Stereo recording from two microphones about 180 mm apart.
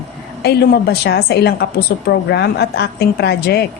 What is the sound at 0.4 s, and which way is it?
A woman's voice, 65° left (ahead or behind).